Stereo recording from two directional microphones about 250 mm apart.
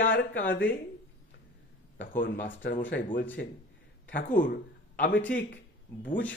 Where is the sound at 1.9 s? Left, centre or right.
Left.